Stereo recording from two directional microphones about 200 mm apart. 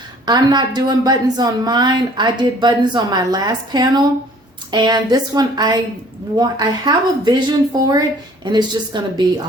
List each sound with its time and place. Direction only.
0.3 s a woman's voice: 20° right (ahead or behind)